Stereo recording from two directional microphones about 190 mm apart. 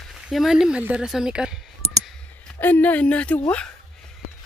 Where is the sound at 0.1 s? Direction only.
Centre (ahead or behind).